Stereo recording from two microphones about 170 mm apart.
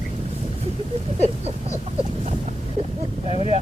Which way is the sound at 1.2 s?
35° right (ahead or behind).